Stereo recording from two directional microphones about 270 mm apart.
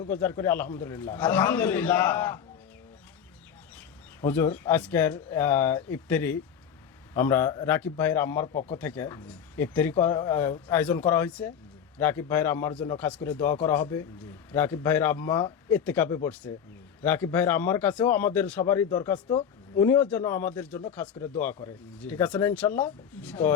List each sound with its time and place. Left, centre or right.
0.1 s speech: centre
3.8 s speech: centre